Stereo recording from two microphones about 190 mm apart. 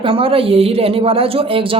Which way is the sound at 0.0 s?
30° right (ahead or behind).